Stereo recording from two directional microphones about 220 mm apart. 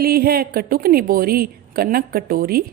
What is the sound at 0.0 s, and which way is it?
A woman's voice, 45° right (ahead or behind).